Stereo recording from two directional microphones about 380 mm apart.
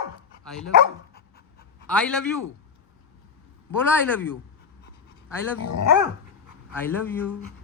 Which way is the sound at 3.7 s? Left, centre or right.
Centre.